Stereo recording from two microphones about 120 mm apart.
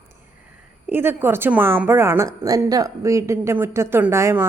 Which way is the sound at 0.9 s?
20° right (ahead or behind).